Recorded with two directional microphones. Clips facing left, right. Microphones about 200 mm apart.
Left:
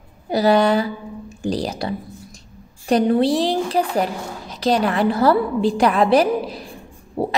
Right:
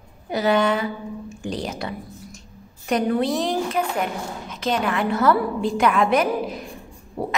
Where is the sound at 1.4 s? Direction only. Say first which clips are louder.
Left 6 dB; 35° left (ahead or behind).